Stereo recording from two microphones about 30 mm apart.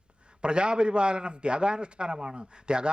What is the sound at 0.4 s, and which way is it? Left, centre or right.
A man's voice, right.